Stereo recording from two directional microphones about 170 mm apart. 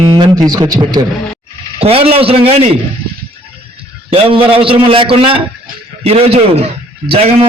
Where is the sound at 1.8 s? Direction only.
35° right (ahead or behind).